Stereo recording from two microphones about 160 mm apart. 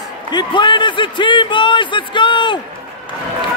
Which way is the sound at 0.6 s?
30° left (ahead or behind).